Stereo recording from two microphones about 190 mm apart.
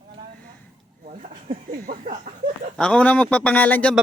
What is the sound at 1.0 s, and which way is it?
Speech, 40° right (ahead or behind).